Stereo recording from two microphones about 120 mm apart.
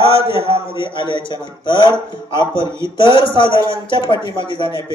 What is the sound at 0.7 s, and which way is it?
Speech, 45° left (ahead or behind).